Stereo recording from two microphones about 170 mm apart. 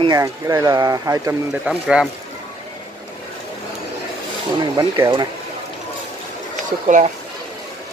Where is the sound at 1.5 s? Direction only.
5° right (ahead or behind).